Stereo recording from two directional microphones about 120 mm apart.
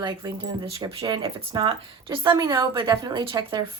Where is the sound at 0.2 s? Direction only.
30° right (ahead or behind).